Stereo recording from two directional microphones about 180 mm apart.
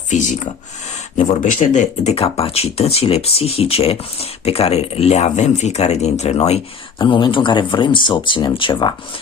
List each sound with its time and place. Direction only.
0.1 s speech: 45° left (ahead or behind); by 9.0 s 25° left (ahead or behind)